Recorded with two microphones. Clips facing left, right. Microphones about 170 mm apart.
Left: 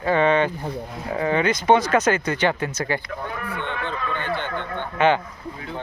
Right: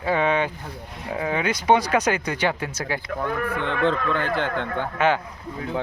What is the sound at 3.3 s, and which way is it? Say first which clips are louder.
Speech: right 5 dB; 50° right (ahead or behind).